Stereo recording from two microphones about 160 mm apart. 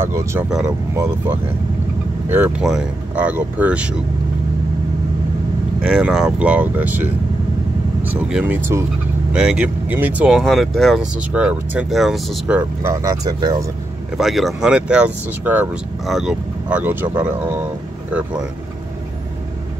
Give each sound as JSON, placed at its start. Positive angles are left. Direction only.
{"t": 0.0, "sound": "speech", "side_deg": -15}
{"t": 5.8, "sound": "speech", "side_deg": -5}
{"t": 12.9, "sound": "speech", "side_deg": -20}
{"t": 14.1, "sound": "speech", "side_deg": 0}